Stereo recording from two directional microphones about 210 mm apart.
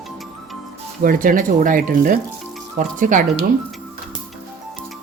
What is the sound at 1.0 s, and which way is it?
Speech, 40° right (ahead or behind).